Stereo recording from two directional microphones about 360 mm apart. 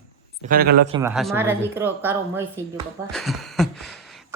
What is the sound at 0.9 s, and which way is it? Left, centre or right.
Speech, centre.